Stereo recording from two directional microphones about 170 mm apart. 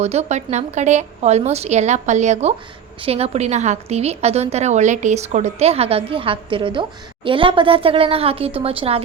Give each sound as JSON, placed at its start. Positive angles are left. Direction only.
{"t": 0.0, "sound": "a woman's voice", "side_deg": -40}